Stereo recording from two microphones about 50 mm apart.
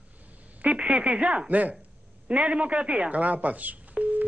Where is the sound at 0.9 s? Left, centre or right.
Right.